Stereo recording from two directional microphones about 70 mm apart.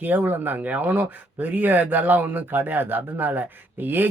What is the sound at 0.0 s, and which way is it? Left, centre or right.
Speech, right.